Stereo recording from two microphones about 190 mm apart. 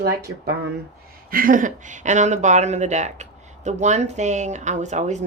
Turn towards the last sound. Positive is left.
turn(degrees=-40)  # may be behind; listen again after turning